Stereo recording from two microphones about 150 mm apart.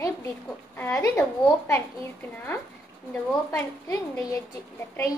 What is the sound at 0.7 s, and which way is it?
A woman's voice, 15° left (ahead or behind).